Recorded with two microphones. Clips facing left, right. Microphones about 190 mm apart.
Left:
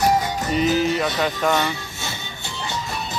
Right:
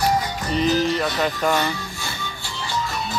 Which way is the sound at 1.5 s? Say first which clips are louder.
Even; 20° left (ahead or behind).